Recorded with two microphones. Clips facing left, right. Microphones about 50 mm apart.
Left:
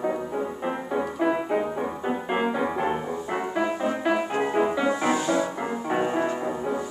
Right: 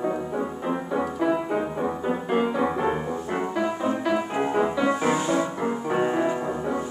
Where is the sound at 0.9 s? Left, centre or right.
Centre.